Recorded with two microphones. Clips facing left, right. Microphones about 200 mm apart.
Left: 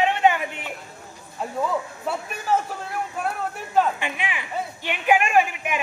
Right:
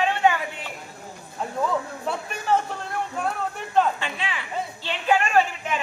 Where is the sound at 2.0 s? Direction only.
5° left (ahead or behind).